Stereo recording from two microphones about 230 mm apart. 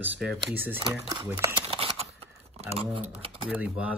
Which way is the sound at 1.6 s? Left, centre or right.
Right.